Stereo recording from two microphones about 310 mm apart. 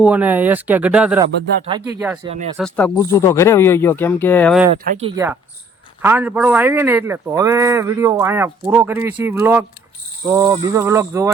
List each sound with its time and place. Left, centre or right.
0.0 s speech: centre
2.2 s speech: right
2.6 s speech: centre
4.8 s speech: centre
6.0 s a man's voice: centre